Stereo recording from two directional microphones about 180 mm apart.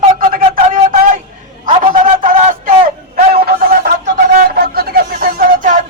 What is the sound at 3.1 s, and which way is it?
Music, 60° right (ahead or behind).